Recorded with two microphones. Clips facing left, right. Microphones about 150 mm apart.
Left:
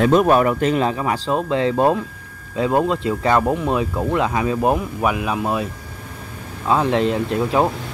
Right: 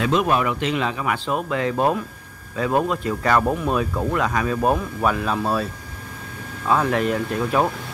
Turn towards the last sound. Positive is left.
turn(degrees=25)  # may be behind; listen again after turning